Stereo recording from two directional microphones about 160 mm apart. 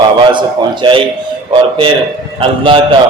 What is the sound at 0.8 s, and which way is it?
Speech, 30° right (ahead or behind).